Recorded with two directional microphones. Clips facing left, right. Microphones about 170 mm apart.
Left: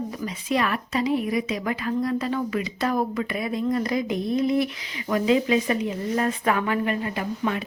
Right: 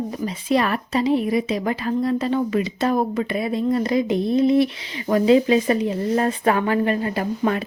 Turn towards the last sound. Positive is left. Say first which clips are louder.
# right 5 dB
turn(degrees=-40)  # may be behind; listen again after turning